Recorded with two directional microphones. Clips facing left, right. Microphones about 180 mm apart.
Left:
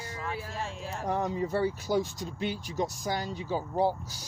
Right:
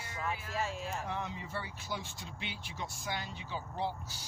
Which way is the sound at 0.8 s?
40° left (ahead or behind).